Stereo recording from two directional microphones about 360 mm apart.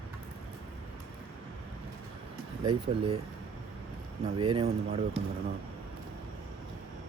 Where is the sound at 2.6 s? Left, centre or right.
Centre.